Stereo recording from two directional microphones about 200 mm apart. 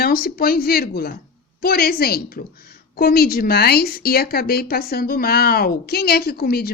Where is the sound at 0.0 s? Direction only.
50° left (ahead or behind).